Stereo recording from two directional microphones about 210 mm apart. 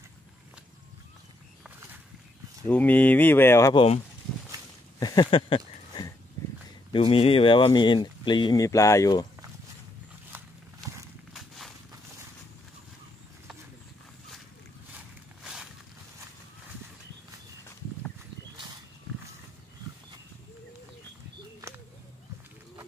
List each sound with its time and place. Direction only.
2.7 s speech: 10° left (ahead or behind)
5.0 s a sound: 20° left (ahead or behind)
6.9 s speech: 25° left (ahead or behind)
11.3 s walk: centre (ahead or behind)
15.4 s walk: 5° right (ahead or behind)
21.5 s a sound: 15° right (ahead or behind)